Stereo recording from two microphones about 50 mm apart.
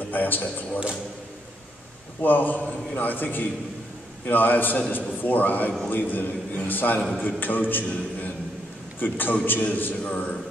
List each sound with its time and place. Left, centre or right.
0.1 s speech: left
2.2 s a man's voice: left